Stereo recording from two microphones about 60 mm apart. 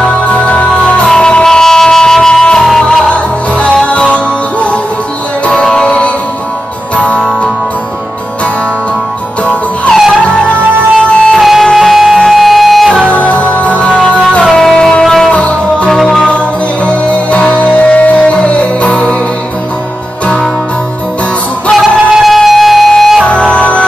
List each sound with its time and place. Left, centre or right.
0.0 s music: left
10.2 s music: centre
11.3 s music: centre
13.0 s music: left
14.5 s music: centre
15.3 s music: left
15.9 s music: centre
16.3 s music: left
21.7 s music: centre
23.2 s music: centre